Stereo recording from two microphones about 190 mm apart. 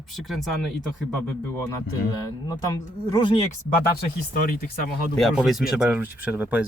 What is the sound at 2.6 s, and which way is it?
Speech, 20° left (ahead or behind).